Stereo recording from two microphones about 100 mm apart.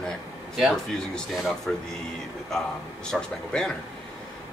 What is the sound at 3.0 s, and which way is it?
Speech, 5° left (ahead or behind).